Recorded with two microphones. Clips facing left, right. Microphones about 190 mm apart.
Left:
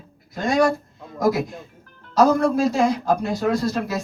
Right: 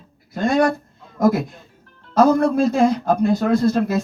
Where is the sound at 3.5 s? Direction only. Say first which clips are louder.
Right 6 dB; 55° right (ahead or behind).